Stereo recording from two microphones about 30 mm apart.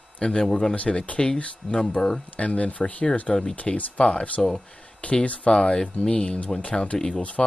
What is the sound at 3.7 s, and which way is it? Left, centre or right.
Speech, left.